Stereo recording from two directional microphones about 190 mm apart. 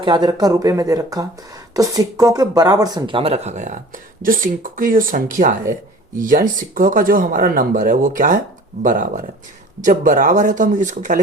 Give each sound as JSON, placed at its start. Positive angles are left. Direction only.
{"t": 0.0, "sound": "speech", "side_deg": -25}